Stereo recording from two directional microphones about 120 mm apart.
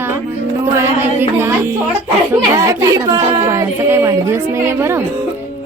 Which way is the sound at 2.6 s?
30° right (ahead or behind).